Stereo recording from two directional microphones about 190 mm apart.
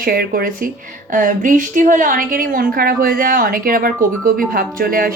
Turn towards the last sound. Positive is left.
turn(degrees=-50)  # may be behind; listen again after turning